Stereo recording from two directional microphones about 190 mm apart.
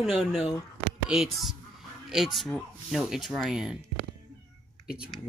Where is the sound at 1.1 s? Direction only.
Centre (ahead or behind).